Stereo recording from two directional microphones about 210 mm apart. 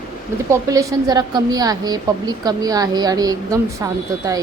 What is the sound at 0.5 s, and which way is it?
A woman's voice, 15° right (ahead or behind).